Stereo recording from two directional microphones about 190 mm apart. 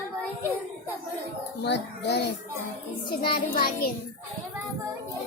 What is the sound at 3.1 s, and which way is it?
Child singing, 55° left (ahead or behind).